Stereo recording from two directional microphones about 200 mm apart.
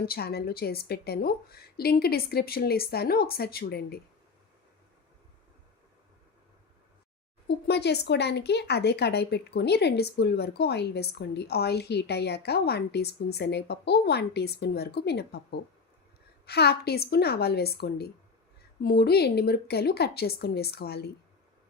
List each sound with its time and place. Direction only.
0.0 s a woman's voice: 50° left (ahead or behind)
7.4 s a woman's voice: 55° left (ahead or behind)